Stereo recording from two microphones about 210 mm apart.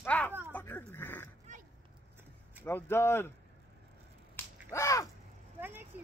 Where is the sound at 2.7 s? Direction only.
10° left (ahead or behind).